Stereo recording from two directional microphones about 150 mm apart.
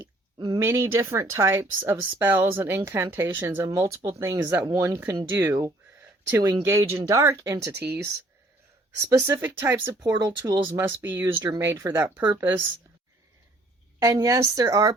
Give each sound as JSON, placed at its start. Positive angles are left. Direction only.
{"t": 0.0, "sound": "a sound", "side_deg": -30}
{"t": 0.6, "sound": "a woman's voice", "side_deg": -20}
{"t": 14.0, "sound": "a woman's voice", "side_deg": -20}